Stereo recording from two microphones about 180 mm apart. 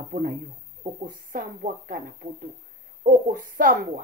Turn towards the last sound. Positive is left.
turn(degrees=-50)  # may be behind; listen again after turning